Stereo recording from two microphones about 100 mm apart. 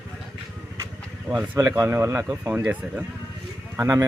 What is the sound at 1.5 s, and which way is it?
Speech, 30° right (ahead or behind).